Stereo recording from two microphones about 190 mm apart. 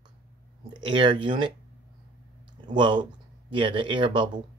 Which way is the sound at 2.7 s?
25° right (ahead or behind).